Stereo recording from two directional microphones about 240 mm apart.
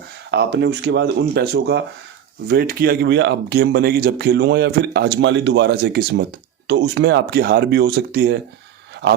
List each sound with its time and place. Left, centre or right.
0.3 s speech: right